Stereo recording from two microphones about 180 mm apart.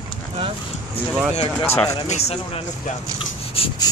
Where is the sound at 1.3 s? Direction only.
30° left (ahead or behind).